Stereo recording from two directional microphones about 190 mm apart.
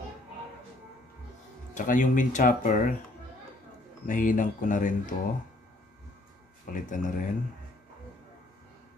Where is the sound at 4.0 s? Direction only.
45° left (ahead or behind).